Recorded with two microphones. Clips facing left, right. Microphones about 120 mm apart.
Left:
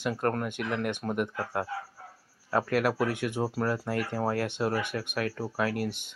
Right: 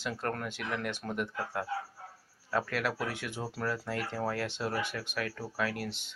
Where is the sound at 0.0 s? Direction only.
50° left (ahead or behind).